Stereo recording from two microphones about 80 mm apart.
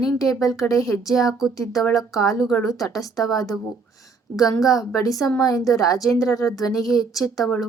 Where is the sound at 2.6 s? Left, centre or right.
Left.